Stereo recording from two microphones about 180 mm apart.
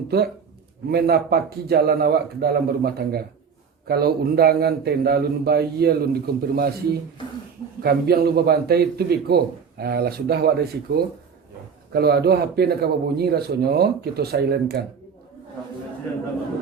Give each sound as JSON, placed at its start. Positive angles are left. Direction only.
{"t": 0.1, "sound": "a man's voice", "side_deg": -60}
{"t": 7.8, "sound": "a man's voice", "side_deg": -60}